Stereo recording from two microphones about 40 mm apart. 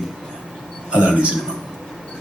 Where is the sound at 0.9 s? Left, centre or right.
Right.